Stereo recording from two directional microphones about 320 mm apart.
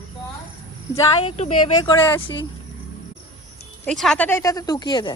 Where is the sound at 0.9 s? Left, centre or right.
Centre.